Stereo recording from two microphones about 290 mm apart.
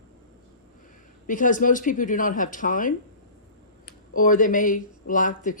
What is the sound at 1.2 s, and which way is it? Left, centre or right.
Speech, left.